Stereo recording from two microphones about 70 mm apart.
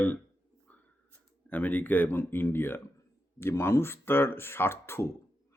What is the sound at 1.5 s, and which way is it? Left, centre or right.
Speech, left.